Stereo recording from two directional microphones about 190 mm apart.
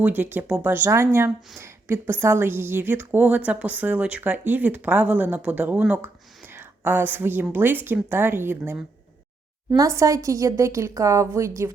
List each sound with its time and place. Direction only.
0.0 s a woman's voice: 10° right (ahead or behind)